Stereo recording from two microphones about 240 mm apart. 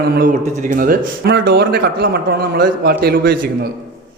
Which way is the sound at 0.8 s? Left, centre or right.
Right.